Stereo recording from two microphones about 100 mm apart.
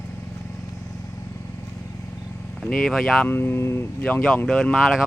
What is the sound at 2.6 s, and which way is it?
Speech, 5° left (ahead or behind).